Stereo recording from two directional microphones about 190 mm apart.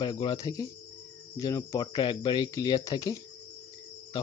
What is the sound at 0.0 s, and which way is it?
Speech, 25° left (ahead or behind).